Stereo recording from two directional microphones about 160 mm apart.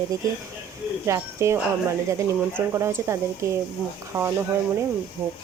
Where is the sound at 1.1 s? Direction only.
15° right (ahead or behind).